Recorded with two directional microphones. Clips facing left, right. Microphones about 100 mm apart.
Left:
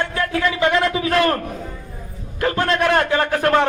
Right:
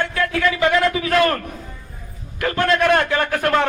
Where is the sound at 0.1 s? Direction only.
25° left (ahead or behind).